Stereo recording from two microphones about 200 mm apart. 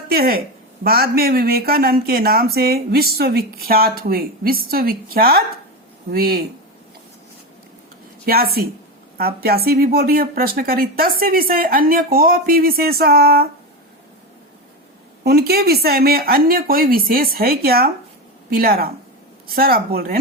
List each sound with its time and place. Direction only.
0.1 s speech: 50° right (ahead or behind)
8.2 s speech: 50° right (ahead or behind)
15.2 s speech: 50° right (ahead or behind)